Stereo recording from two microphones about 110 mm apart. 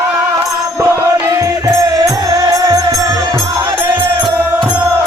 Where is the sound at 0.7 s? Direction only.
25° right (ahead or behind); by 3.7 s 45° right (ahead or behind).